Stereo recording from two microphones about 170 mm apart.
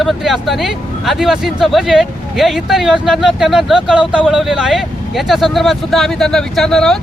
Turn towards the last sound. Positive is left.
turn(degrees=5)  # may be behind; listen again after turning